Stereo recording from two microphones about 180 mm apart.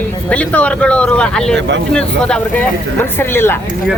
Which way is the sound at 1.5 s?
75° right (ahead or behind).